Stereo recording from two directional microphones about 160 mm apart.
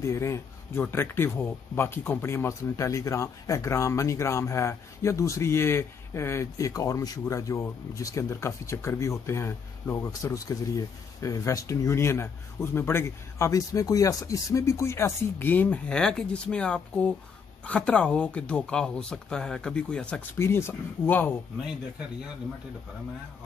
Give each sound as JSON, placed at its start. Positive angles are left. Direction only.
{"t": 0.0, "sound": "speech", "side_deg": 20}